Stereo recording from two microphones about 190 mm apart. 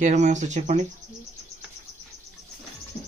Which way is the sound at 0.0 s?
40° right (ahead or behind).